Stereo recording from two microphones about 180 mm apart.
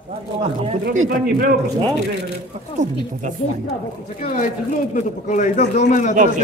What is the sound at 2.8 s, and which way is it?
Speech, 45° right (ahead or behind).